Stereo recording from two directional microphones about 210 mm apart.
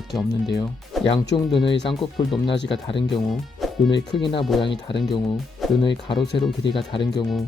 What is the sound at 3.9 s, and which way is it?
Speech, 20° left (ahead or behind).